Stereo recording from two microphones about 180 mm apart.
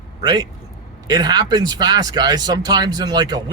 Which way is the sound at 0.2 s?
25° right (ahead or behind).